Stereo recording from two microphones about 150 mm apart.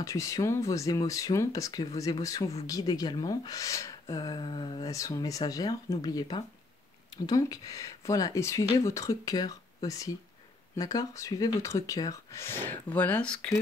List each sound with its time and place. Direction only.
0.0 s speech: 20° left (ahead or behind); by 13.6 s 5° left (ahead or behind)